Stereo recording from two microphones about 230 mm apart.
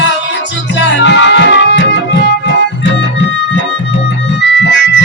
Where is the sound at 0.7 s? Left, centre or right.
Left.